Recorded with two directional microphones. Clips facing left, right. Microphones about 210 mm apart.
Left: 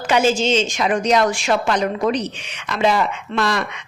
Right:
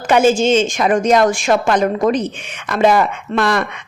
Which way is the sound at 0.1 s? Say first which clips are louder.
Right 5 dB; 50° right (ahead or behind).